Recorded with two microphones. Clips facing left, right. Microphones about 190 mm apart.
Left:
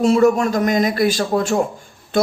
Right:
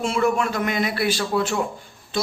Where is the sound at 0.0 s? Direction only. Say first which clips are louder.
Left 7 dB; 40° left (ahead or behind).